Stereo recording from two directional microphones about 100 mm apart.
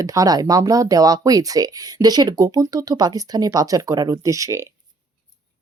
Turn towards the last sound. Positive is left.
turn(degrees=-30)  # may be behind; listen again after turning